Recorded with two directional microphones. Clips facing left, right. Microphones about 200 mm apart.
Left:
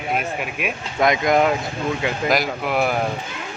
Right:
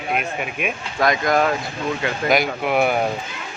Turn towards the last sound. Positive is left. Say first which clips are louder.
# right 2 dB
turn(degrees=0)  # may be behind; listen again after turning